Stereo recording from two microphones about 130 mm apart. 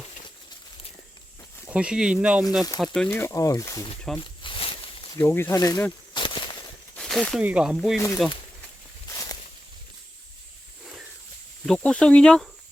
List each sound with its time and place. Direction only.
1.6 s speech: 10° right (ahead or behind)
2.8 s speech: 5° left (ahead or behind)
3.1 s speech: 20° left (ahead or behind)
4.2 s snake: 40° left (ahead or behind)
5.2 s speech: 20° left (ahead or behind)
6.1 s a sound: 40° left (ahead or behind)
6.9 s a sound: 5° left (ahead or behind)
7.3 s speech: 5° right (ahead or behind)
7.9 s speech: 25° left (ahead or behind)
9.0 s a sound: 25° left (ahead or behind)
11.6 s speech: 5° left (ahead or behind)